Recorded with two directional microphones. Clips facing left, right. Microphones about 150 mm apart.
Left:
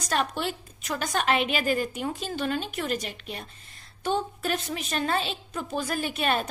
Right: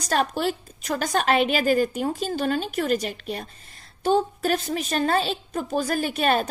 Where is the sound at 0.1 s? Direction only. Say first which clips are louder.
Right 5 dB; 40° right (ahead or behind).